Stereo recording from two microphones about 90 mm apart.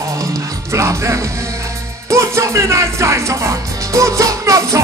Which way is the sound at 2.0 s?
35° right (ahead or behind).